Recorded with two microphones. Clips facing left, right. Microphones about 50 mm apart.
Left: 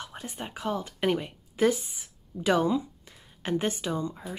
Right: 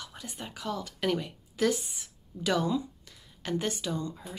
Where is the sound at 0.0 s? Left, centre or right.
Left.